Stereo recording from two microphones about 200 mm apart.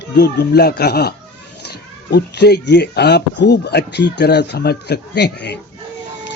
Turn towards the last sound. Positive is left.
turn(degrees=60)  # may be behind; listen again after turning